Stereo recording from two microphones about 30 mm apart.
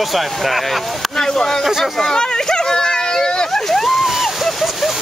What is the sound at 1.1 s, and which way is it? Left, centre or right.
Speech, left.